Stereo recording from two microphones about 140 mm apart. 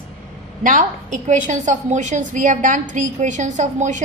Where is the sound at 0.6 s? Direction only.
70° right (ahead or behind).